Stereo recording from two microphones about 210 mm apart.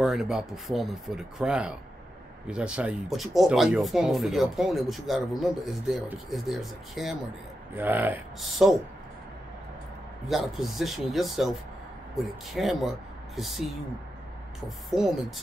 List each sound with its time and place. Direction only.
0.0 s speech: centre (ahead or behind)
10.2 s speech: centre (ahead or behind)
14.9 s speech: centre (ahead or behind)